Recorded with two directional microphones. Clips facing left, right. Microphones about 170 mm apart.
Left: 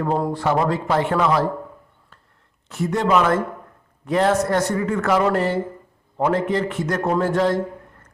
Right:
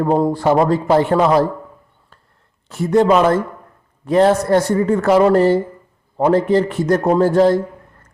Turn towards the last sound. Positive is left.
turn(degrees=-35)  # may be behind; listen again after turning